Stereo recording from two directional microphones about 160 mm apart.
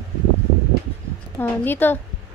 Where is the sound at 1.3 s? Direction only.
15° left (ahead or behind).